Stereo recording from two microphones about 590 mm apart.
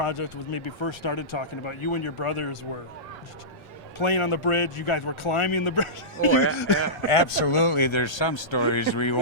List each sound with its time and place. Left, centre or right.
0.0 s speech: left
4.0 s speech: left
6.1 s speech: left
6.6 s speech: left